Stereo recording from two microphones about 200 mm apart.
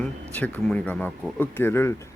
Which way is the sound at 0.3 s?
5° left (ahead or behind).